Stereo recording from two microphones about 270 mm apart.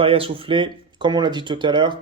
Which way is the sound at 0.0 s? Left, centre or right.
Centre.